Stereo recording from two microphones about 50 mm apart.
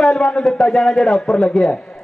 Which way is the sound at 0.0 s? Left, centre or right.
Centre.